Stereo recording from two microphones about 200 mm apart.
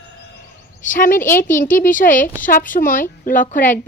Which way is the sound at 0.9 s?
40° left (ahead or behind).